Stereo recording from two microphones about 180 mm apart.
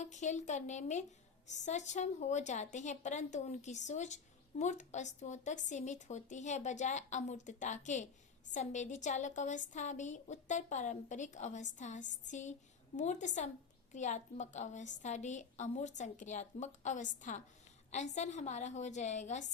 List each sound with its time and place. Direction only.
0.0 s a woman's voice: 40° left (ahead or behind)